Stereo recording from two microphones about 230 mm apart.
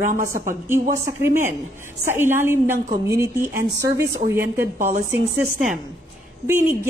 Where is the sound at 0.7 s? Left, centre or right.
Centre.